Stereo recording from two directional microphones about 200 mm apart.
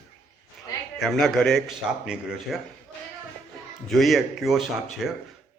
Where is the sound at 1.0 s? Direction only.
Centre (ahead or behind).